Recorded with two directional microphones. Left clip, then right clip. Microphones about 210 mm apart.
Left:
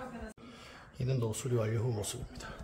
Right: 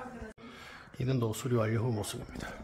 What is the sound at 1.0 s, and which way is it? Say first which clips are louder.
Speech: right 3 dB; 20° right (ahead or behind).